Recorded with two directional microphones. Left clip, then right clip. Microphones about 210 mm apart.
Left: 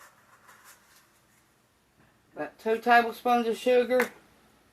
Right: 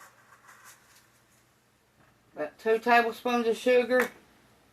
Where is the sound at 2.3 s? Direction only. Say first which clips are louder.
Right 2 dB; 25° right (ahead or behind).